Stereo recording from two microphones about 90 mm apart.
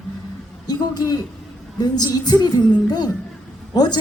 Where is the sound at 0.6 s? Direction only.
50° left (ahead or behind).